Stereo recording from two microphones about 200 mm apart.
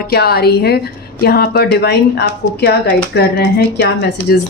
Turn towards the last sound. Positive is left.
turn(degrees=55)  # may be behind; listen again after turning